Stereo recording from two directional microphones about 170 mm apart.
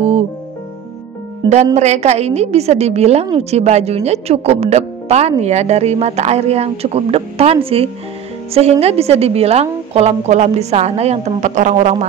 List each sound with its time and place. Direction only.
1.5 s a woman's voice: 40° right (ahead or behind)